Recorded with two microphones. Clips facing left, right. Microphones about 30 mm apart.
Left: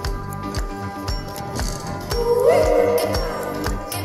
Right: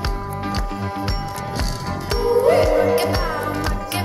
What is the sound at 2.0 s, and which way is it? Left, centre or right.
Music, right.